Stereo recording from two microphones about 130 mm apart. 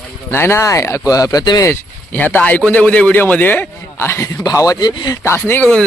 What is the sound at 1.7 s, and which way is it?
A man's voice, 15° left (ahead or behind).